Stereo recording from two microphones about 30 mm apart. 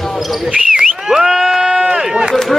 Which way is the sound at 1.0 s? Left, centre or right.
Centre.